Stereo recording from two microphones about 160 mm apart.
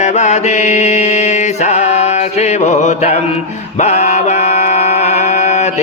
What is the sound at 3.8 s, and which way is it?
Music, 45° left (ahead or behind).